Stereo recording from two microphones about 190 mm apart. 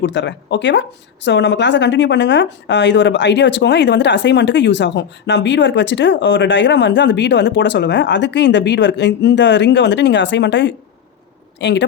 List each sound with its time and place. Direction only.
0.0 s speech: 70° left (ahead or behind)